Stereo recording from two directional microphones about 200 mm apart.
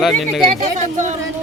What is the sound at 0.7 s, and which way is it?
Speech, 40° right (ahead or behind).